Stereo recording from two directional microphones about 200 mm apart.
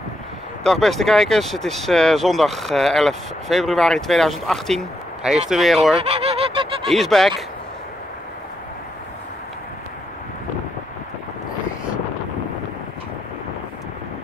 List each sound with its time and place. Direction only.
0.7 s speech: centre (ahead or behind)
6.0 s a sound: 30° right (ahead or behind)
6.9 s speech: centre (ahead or behind)